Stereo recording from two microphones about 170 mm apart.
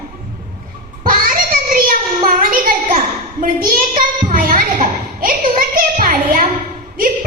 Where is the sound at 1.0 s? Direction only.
55° right (ahead or behind).